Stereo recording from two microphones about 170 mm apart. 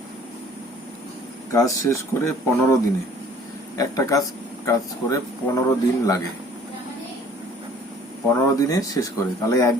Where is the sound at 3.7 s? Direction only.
20° left (ahead or behind).